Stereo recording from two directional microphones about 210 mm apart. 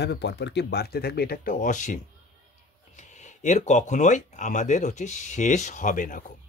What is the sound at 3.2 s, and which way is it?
A man's voice, 35° left (ahead or behind).